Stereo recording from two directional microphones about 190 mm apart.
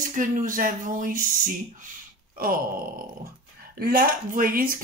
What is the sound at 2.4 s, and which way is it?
Speech, 50° right (ahead or behind).